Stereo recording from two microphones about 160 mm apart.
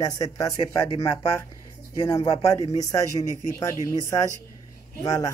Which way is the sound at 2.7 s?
20° left (ahead or behind).